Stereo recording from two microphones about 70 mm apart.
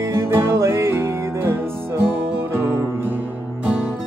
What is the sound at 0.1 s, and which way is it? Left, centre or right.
Music, right.